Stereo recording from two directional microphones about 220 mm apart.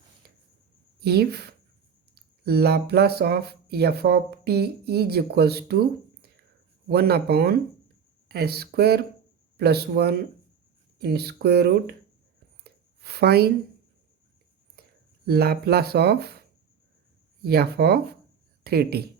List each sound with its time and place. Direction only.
0.9 s a woman's voice: 45° right (ahead or behind)
13.0 s speech: 45° right (ahead or behind)
14.8 s a sound: 45° right (ahead or behind)
15.3 s speech: 45° right (ahead or behind)